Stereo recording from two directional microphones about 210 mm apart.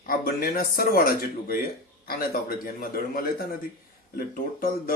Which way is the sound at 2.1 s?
45° left (ahead or behind).